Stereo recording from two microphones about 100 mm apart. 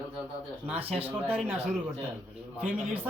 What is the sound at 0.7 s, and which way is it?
Speech, 75° right (ahead or behind).